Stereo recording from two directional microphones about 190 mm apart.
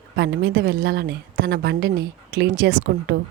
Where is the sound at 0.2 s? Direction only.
60° right (ahead or behind).